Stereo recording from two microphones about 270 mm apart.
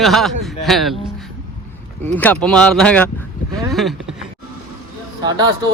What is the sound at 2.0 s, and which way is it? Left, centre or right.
Speech, centre.